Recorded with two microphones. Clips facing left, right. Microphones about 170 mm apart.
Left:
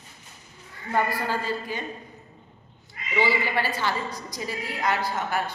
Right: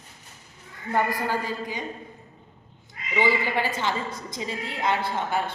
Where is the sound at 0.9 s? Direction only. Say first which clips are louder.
Right 1 dB; 15° right (ahead or behind).